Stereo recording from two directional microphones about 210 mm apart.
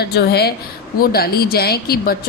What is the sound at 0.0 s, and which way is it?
Speech, 50° left (ahead or behind).